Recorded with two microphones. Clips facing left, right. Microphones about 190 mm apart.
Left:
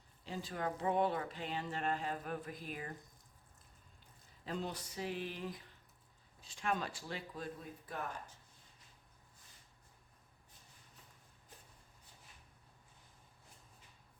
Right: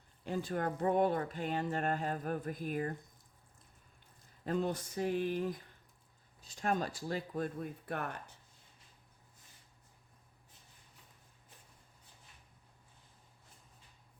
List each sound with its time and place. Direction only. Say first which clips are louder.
0.3 s speech: right 5 dB; 50° right (ahead or behind)
4.4 s speech: right 7 dB; 50° right (ahead or behind)